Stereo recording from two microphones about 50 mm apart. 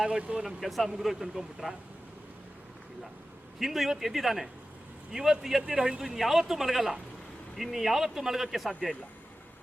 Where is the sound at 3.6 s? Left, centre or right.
Centre.